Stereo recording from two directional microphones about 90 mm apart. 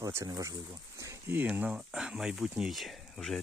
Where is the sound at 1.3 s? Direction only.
20° right (ahead or behind).